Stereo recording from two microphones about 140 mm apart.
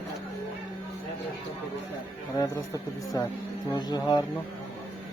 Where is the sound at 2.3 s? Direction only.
25° left (ahead or behind).